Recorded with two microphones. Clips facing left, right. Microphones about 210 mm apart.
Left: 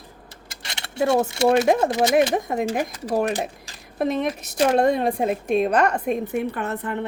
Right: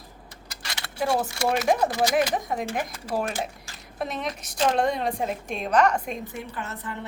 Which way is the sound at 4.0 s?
55° left (ahead or behind).